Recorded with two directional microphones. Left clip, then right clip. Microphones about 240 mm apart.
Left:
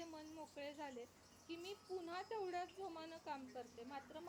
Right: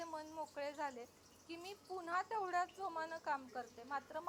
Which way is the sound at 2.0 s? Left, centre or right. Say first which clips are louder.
Right 9 dB; centre.